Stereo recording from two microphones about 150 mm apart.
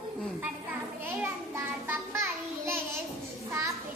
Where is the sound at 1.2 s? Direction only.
15° right (ahead or behind).